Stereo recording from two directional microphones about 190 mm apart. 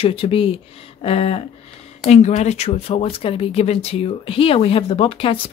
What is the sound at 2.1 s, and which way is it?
Speech, 35° left (ahead or behind).